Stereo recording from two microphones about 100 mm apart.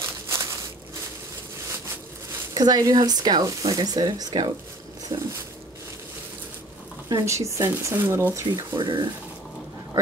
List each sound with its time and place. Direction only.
2.5 s speech: 40° right (ahead or behind)
7.1 s speech: 35° right (ahead or behind)
8.5 s speech: 50° right (ahead or behind)